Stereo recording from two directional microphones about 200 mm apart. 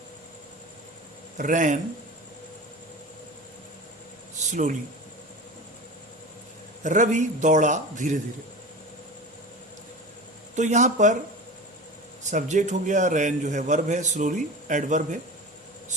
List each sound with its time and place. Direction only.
1.4 s a man's voice: 40° right (ahead or behind)
4.4 s a sound: 35° right (ahead or behind)
6.8 s a man's voice: 40° right (ahead or behind)
10.5 s a man's voice: 35° right (ahead or behind)
12.2 s a man's voice: 35° right (ahead or behind)